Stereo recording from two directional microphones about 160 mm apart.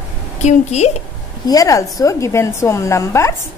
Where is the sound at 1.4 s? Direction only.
20° left (ahead or behind).